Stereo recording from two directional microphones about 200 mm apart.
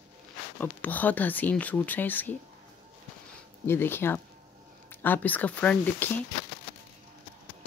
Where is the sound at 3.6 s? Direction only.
10° left (ahead or behind).